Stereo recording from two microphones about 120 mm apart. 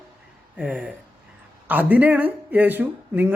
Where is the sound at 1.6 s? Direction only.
15° right (ahead or behind).